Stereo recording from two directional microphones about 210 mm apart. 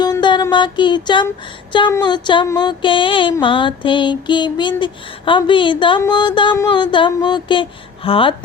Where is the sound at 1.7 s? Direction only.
20° left (ahead or behind).